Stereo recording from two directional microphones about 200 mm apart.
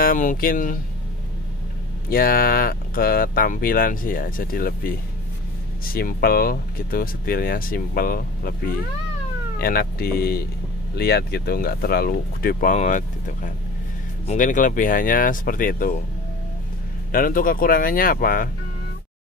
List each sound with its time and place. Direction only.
0.0 s speech: 45° left (ahead or behind)
2.0 s speech: 45° left (ahead or behind)
17.1 s speech: 45° left (ahead or behind)